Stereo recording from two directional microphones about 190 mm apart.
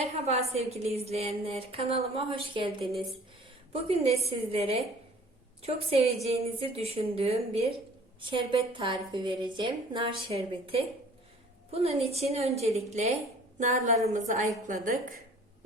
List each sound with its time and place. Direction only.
0.3 s a woman's voice: 35° right (ahead or behind)